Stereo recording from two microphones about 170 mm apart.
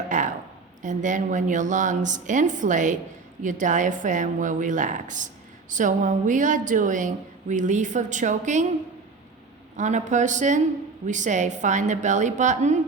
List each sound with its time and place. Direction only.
0.1 s a sound: 45° right (ahead or behind)
0.8 s a woman's voice: 45° right (ahead or behind)
9.7 s a woman's voice: 45° right (ahead or behind)